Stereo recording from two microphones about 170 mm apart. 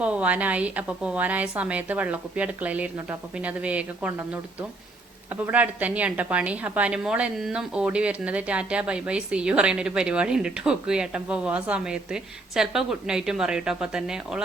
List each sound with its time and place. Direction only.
0.0 s a woman's voice: 5° right (ahead or behind)